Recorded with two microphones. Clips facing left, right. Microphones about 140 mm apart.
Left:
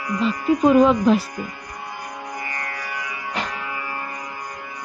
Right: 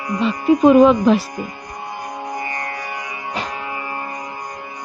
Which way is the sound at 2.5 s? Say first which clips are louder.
Right 3 dB; 25° right (ahead or behind).